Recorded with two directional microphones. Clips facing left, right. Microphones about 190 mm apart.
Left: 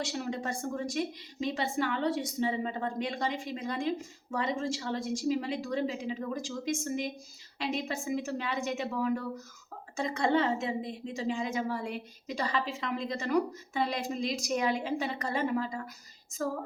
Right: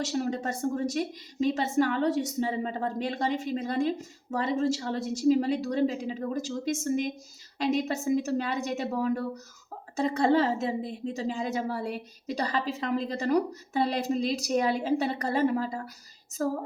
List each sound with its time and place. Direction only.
0.0 s a woman's voice: 40° right (ahead or behind)